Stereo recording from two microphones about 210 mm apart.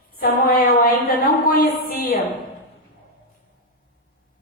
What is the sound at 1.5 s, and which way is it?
Speech, 45° left (ahead or behind).